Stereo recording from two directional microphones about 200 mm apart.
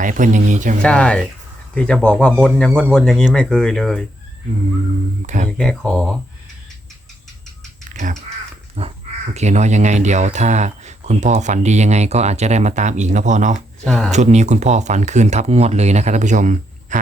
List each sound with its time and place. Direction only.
0.0 s speech: 40° right (ahead or behind)
0.8 s speech: 5° left (ahead or behind)
5.2 s speech: 35° right (ahead or behind)
5.5 s speech: 5° left (ahead or behind)
7.9 s crow: 35° right (ahead or behind)
8.8 s speech: 35° right (ahead or behind)
13.8 s speech: centre (ahead or behind)
14.1 s speech: 35° right (ahead or behind)